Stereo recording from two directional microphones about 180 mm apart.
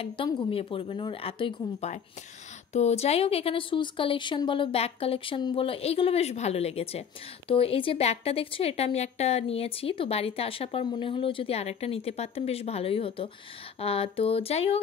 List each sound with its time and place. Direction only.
0.0 s speech: 30° left (ahead or behind)